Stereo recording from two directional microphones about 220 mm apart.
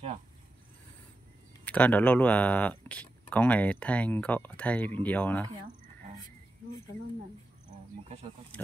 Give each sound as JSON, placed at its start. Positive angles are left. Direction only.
{"t": 1.6, "sound": "speech", "side_deg": 5}